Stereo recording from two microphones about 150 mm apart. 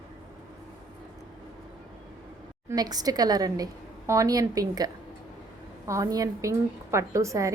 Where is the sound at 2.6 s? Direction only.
25° right (ahead or behind).